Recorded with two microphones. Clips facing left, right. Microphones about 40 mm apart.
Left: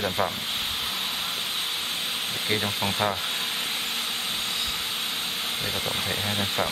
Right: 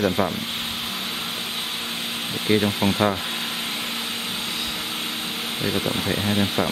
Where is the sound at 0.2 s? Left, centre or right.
Centre.